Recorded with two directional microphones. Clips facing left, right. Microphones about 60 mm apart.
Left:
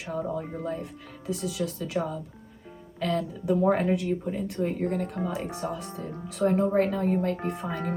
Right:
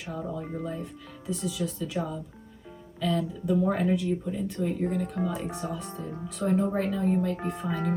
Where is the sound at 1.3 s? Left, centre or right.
Left.